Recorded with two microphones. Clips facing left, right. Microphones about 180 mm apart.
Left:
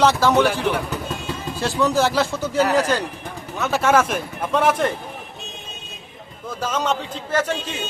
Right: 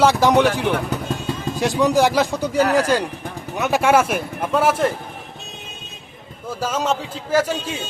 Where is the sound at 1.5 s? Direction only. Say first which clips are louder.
Right 3 dB; 15° right (ahead or behind).